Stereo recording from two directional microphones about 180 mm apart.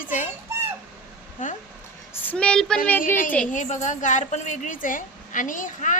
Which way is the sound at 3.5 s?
45° left (ahead or behind).